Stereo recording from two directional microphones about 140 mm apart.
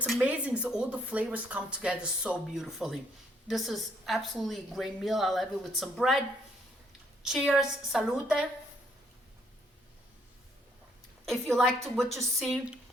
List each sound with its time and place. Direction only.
0.0 s a woman's voice: 10° right (ahead or behind)
7.2 s a woman's voice: centre (ahead or behind)
11.3 s a woman's voice: 5° left (ahead or behind)